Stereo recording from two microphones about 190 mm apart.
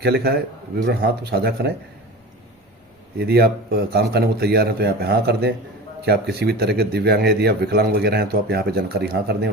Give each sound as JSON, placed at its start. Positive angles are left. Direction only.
{"t": 0.0, "sound": "speech", "side_deg": -55}
{"t": 3.2, "sound": "speech", "side_deg": -55}